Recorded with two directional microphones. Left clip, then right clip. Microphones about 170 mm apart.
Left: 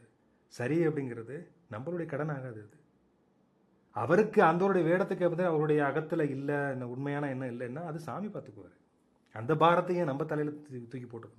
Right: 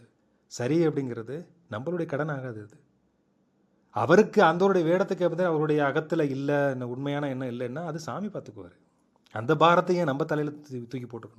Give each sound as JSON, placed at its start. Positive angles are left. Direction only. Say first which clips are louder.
{"t": 0.5, "sound": "speech", "louder": "right 5 dB", "side_deg": -15}
{"t": 3.9, "sound": "a man's voice", "louder": "right 6 dB", "side_deg": -20}
{"t": 9.6, "sound": "speech", "louder": "right 5 dB", "side_deg": -10}
{"t": 9.8, "sound": "speech", "louder": "right 6 dB", "side_deg": -20}